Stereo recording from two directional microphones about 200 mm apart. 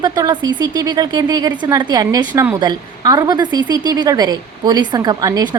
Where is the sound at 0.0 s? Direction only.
20° right (ahead or behind).